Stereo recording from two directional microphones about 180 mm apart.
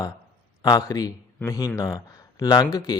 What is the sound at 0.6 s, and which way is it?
A man's voice, 20° left (ahead or behind).